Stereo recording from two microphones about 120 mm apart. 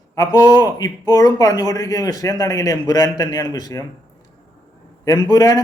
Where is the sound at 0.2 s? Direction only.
30° left (ahead or behind).